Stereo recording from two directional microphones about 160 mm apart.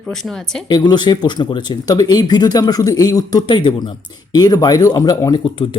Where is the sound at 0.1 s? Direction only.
Centre (ahead or behind).